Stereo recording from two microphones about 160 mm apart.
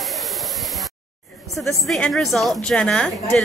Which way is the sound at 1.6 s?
Centre (ahead or behind).